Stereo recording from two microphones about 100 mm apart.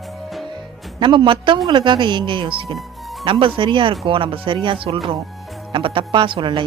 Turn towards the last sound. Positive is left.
turn(degrees=-55)  # may be behind; listen again after turning